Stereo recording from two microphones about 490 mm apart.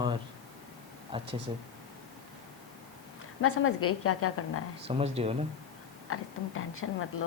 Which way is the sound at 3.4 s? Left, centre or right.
Left.